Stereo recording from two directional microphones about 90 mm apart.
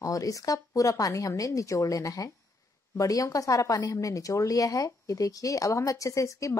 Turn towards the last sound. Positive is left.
turn(degrees=35)  # may be behind; listen again after turning